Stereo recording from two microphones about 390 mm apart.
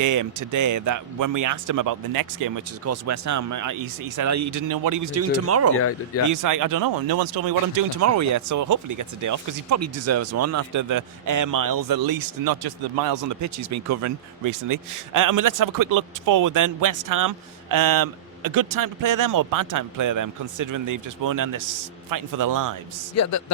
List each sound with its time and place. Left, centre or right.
0.0 s speech: right
2.8 s speech: right
5.7 s speech: left
6.2 s speech: right
8.0 s speech: right
23.1 s a man's voice: left